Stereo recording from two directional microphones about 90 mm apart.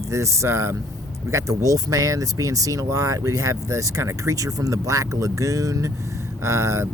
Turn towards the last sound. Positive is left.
turn(degrees=-35)  # may be behind; listen again after turning